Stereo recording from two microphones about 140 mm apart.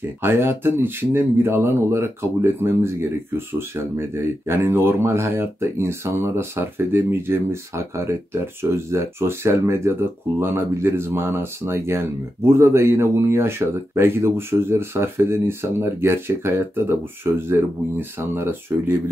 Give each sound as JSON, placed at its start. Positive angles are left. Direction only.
{"t": 0.2, "sound": "speech", "side_deg": -15}